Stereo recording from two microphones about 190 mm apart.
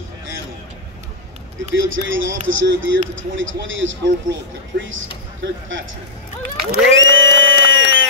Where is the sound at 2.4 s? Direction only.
75° right (ahead or behind).